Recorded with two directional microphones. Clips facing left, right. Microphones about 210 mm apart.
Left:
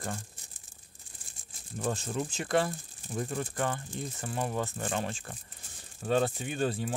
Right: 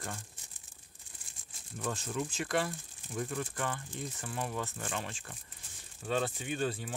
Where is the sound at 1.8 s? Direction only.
35° left (ahead or behind).